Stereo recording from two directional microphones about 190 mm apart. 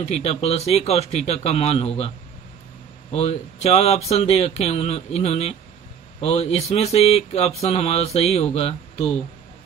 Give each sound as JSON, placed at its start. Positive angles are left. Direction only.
{"t": 0.0, "sound": "speech", "side_deg": 35}
{"t": 3.1, "sound": "speech", "side_deg": 35}